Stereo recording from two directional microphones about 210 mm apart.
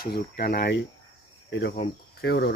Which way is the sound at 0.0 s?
45° left (ahead or behind).